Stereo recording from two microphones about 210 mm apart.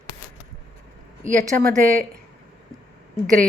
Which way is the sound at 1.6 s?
40° right (ahead or behind).